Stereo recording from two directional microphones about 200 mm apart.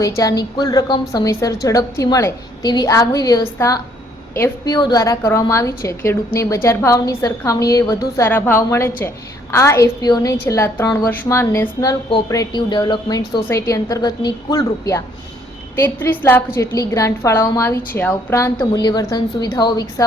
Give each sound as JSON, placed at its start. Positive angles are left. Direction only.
{"t": 0.0, "sound": "a woman's voice", "side_deg": 15}